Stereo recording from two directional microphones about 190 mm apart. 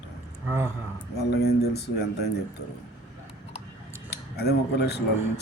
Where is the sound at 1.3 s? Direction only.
60° left (ahead or behind).